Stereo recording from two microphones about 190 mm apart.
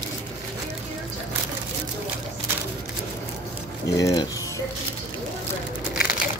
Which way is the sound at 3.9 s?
20° left (ahead or behind).